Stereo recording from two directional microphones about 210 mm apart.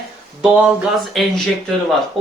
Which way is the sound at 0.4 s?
5° right (ahead or behind).